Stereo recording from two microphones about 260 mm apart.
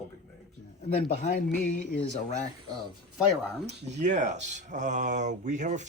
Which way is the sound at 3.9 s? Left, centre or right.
Right.